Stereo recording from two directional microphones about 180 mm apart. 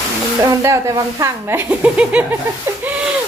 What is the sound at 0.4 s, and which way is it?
Speech, 15° right (ahead or behind).